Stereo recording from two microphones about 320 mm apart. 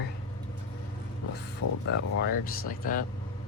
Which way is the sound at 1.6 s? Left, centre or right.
Left.